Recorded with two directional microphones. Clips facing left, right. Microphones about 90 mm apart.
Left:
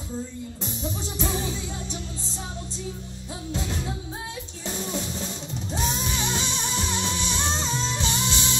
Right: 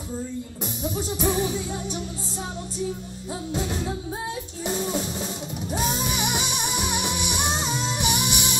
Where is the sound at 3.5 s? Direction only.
20° right (ahead or behind).